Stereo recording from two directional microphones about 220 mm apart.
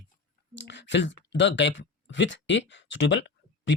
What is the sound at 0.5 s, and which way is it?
Speech, 55° left (ahead or behind).